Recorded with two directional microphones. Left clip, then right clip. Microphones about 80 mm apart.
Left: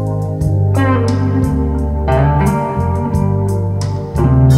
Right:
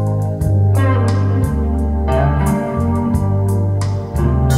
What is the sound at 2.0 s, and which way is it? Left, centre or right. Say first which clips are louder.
Music: left 3 dB; left.